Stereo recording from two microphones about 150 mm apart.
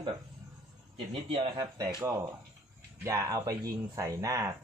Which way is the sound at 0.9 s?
40° right (ahead or behind).